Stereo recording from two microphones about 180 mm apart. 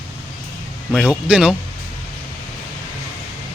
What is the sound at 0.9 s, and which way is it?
Speech, 5° right (ahead or behind).